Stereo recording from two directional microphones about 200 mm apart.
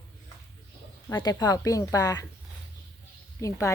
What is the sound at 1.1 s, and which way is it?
Speech, 15° left (ahead or behind).